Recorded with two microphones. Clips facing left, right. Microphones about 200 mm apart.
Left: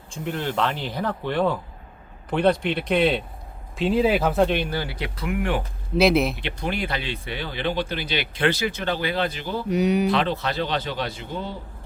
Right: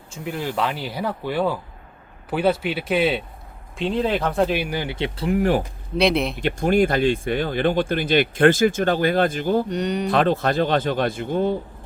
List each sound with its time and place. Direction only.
0.1 s speech: 5° right (ahead or behind); by 5.6 s 40° right (ahead or behind)
6.0 s speech: centre (ahead or behind)
6.4 s speech: 45° right (ahead or behind)
9.6 s speech: 5° left (ahead or behind)
10.1 s speech: 50° right (ahead or behind)